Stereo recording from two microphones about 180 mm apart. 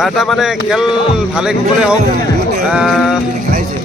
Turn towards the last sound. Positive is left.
turn(degrees=0)  # may be behind; listen again after turning